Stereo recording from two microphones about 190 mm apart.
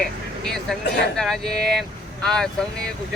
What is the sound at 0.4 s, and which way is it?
A man's voice, centre (ahead or behind).